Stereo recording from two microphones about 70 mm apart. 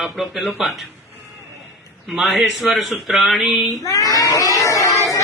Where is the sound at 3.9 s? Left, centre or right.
Left.